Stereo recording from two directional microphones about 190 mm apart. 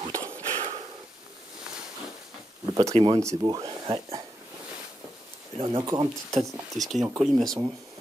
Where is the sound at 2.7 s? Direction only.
25° right (ahead or behind).